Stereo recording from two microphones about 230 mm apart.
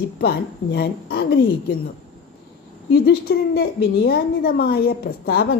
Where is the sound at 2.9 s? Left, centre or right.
Left.